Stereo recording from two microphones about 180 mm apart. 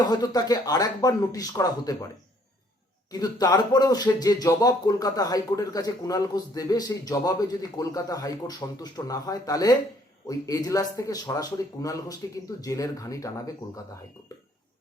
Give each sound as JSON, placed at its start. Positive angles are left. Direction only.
{"t": 0.0, "sound": "speech", "side_deg": 20}
{"t": 3.1, "sound": "speech", "side_deg": 20}